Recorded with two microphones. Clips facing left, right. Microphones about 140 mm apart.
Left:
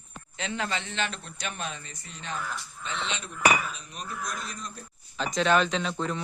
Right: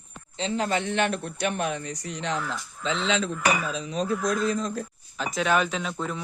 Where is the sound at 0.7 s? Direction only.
55° right (ahead or behind).